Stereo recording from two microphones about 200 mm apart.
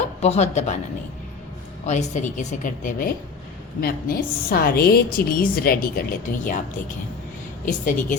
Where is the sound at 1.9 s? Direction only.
35° left (ahead or behind).